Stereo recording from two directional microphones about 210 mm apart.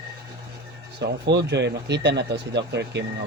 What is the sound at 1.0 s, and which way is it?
Speech, 55° right (ahead or behind).